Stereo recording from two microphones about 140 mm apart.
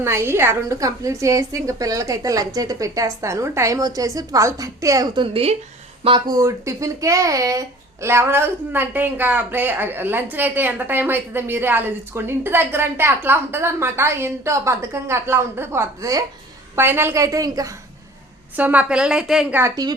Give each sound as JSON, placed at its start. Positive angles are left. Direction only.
{"t": 0.0, "sound": "a woman's voice", "side_deg": -15}
{"t": 6.1, "sound": "a woman's voice", "side_deg": -30}
{"t": 18.5, "sound": "speech", "side_deg": -10}
{"t": 19.5, "sound": "a woman's voice", "side_deg": -25}